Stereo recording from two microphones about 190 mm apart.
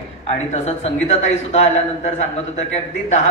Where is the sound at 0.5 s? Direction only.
35° left (ahead or behind).